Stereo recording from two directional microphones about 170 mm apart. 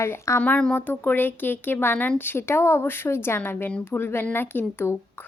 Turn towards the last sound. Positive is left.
turn(degrees=15)  # may be behind; listen again after turning